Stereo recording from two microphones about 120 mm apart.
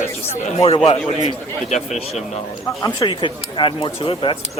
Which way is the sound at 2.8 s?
35° left (ahead or behind).